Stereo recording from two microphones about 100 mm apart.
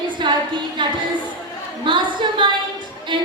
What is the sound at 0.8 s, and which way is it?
A woman's voice, 50° right (ahead or behind).